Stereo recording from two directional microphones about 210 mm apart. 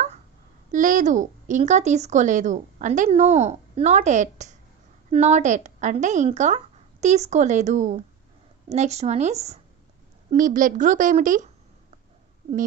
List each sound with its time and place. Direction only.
0.7 s speech: 40° right (ahead or behind)